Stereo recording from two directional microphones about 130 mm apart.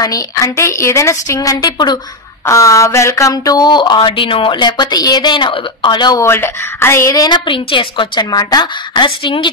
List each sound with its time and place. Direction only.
0.0 s a woman's voice: 25° left (ahead or behind)
6.2 s speech: 20° left (ahead or behind); by 9.5 s 40° left (ahead or behind)